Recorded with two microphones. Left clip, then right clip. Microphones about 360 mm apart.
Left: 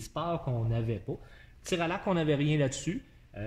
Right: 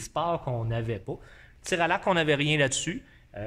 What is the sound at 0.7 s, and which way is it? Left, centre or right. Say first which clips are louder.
Speech: right 3 dB; right.